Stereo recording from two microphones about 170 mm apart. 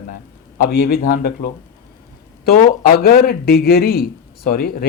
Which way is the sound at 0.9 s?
65° left (ahead or behind).